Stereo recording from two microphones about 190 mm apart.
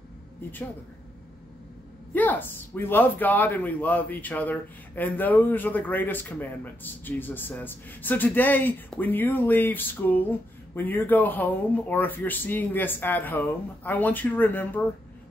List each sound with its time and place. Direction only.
2.1 s speech: 10° left (ahead or behind)